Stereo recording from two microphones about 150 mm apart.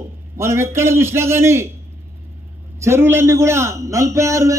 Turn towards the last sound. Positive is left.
turn(degrees=-20)  # may be behind; listen again after turning